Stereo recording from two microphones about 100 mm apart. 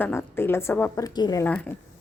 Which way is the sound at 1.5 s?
15° left (ahead or behind).